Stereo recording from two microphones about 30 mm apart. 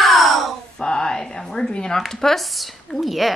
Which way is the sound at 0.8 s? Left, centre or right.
Left.